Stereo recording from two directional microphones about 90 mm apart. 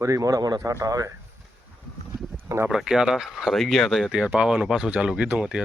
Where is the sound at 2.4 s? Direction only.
30° right (ahead or behind).